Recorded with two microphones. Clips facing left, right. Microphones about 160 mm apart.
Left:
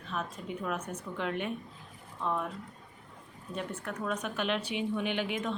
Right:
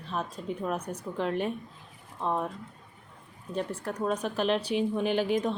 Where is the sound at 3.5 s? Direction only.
35° right (ahead or behind).